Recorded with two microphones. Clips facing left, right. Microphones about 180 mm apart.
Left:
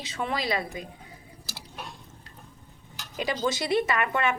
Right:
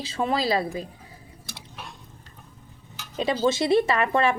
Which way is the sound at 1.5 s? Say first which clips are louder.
Left 1 dB; 5° left (ahead or behind).